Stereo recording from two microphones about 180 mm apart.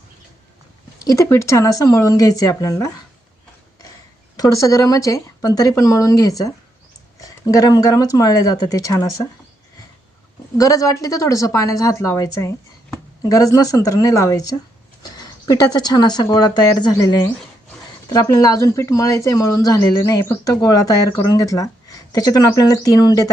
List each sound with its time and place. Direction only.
1.0 s speech: 15° left (ahead or behind)
4.4 s a woman's voice: 20° left (ahead or behind)
10.6 s a woman's voice: 20° left (ahead or behind)